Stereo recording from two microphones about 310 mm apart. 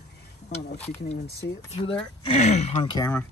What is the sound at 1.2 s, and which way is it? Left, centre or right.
Speech, left.